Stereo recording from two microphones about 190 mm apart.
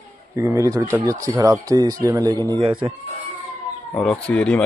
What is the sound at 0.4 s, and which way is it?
Speech, 15° right (ahead or behind).